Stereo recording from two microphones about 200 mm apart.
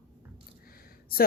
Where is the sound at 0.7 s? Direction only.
45° left (ahead or behind).